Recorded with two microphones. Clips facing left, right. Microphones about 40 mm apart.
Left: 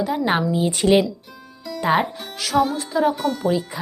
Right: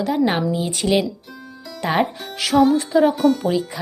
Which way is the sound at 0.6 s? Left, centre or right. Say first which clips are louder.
Left 5 dB; centre.